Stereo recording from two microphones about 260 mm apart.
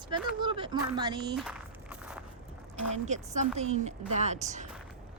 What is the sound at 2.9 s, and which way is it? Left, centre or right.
A woman's voice, right.